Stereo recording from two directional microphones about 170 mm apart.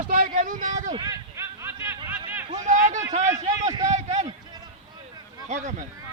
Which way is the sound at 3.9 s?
40° right (ahead or behind).